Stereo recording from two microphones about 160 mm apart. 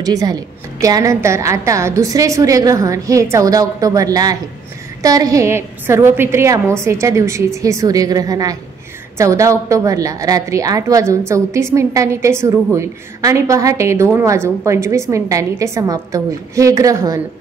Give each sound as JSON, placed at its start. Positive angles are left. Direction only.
{"t": 0.0, "sound": "a woman's voice", "side_deg": -25}